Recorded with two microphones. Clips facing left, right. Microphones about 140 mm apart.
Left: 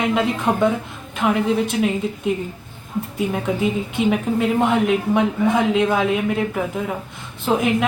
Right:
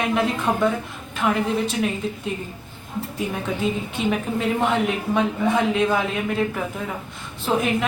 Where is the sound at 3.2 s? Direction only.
15° left (ahead or behind).